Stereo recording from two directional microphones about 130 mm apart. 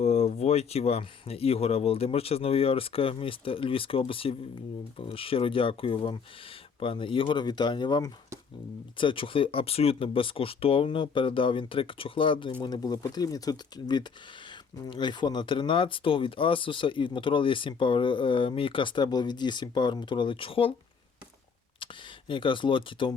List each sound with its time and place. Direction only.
0.0 s speech: 50° left (ahead or behind)
22.3 s speech: 40° left (ahead or behind)